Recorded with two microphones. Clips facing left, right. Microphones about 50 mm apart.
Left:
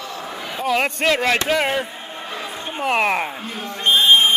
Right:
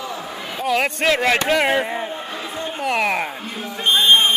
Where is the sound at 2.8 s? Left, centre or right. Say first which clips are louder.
Left 2 dB; left.